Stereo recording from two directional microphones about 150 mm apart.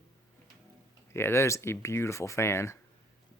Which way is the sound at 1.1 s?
15° left (ahead or behind).